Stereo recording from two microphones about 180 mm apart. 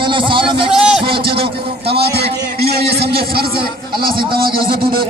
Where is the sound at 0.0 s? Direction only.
25° right (ahead or behind).